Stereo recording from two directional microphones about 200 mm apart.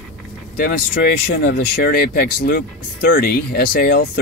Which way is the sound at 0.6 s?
45° left (ahead or behind).